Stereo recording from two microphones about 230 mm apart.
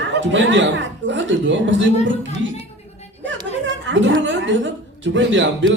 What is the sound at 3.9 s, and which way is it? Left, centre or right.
A woman's voice, right.